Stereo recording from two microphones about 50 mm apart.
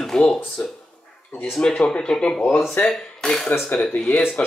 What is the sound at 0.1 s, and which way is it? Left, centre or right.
Speech, centre.